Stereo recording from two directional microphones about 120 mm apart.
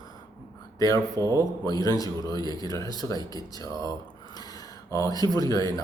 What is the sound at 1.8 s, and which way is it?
Speech, 30° left (ahead or behind).